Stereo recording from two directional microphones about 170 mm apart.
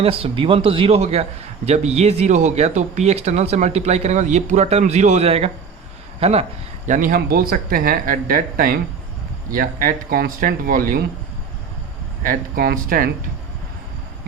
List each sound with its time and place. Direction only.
0.0 s speech: 35° right (ahead or behind)
6.8 s speech: 50° right (ahead or behind)
12.2 s speech: 55° right (ahead or behind)